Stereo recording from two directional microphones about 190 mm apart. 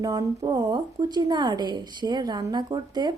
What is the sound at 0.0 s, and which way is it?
Speech, 20° right (ahead or behind).